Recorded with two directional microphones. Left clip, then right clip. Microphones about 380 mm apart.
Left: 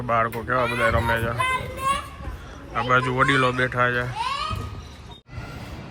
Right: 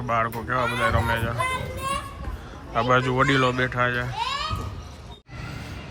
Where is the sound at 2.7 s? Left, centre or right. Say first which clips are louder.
Even; centre.